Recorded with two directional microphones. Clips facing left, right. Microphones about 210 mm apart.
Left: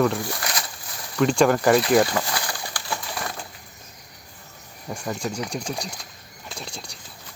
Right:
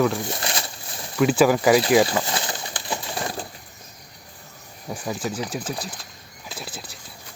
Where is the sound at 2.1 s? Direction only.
25° right (ahead or behind).